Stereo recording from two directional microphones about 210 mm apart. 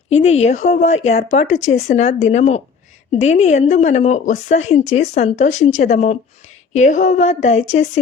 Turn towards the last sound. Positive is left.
turn(degrees=35)  # may be behind; listen again after turning